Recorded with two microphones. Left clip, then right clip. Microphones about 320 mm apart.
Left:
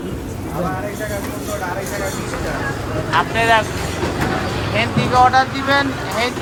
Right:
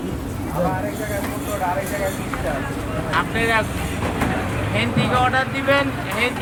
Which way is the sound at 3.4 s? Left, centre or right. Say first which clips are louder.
Left 6 dB; centre.